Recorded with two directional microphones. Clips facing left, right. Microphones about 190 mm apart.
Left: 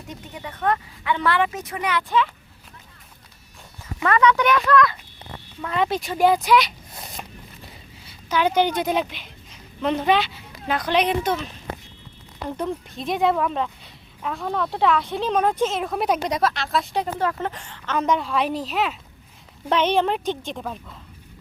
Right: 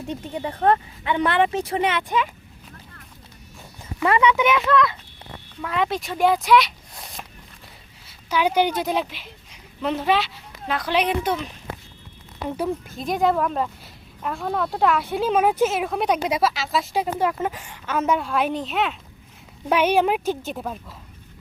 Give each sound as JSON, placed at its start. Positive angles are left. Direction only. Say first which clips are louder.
{"t": 0.1, "sound": "speech", "louder": "right 7 dB", "side_deg": -30}
{"t": 4.0, "sound": "a woman's voice", "louder": "even", "side_deg": -15}
{"t": 4.7, "sound": "speech", "louder": "left 1 dB", "side_deg": -25}
{"t": 5.6, "sound": "a woman's voice", "louder": "left 1 dB", "side_deg": 0}
{"t": 12.5, "sound": "a woman's voice", "louder": "right 2 dB", "side_deg": -10}
{"t": 19.6, "sound": "a woman's voice", "louder": "right 1 dB", "side_deg": -10}